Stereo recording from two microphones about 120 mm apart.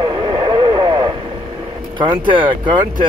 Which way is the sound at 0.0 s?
40° right (ahead or behind).